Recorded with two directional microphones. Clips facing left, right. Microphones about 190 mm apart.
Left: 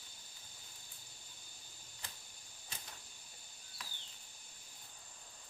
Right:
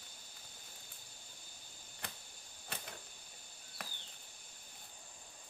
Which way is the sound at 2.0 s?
60° right (ahead or behind).